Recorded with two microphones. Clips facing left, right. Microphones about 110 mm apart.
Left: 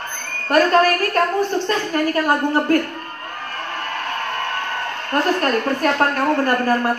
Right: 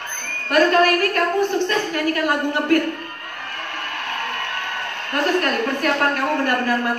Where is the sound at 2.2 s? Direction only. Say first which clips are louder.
Left 2 dB; 35° left (ahead or behind).